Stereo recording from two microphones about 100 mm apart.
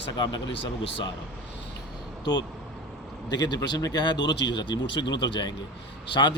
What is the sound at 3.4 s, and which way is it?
A man's voice, 45° left (ahead or behind).